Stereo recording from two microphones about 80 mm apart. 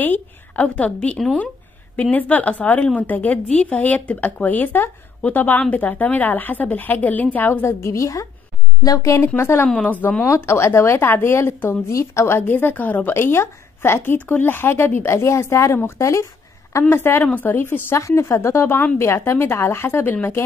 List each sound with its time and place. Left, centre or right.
0.0 s a woman's voice: left
7.6 s a woman's voice: left
9.8 s speech: left
10.2 s a woman's voice: left